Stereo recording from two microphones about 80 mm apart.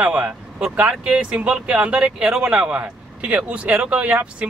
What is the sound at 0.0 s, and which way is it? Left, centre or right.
Speech, centre.